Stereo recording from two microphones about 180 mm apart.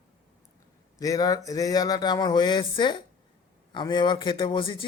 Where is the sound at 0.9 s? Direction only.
20° left (ahead or behind).